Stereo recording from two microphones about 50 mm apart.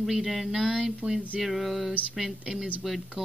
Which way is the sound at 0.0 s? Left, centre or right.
Centre.